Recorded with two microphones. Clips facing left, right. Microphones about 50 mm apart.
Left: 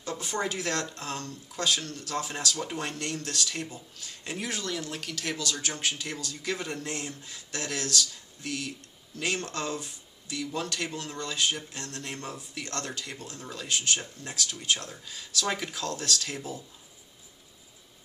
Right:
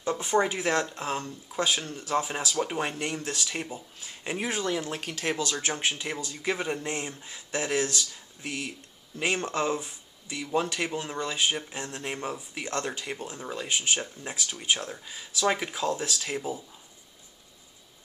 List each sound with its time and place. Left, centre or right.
0.0 s speech: right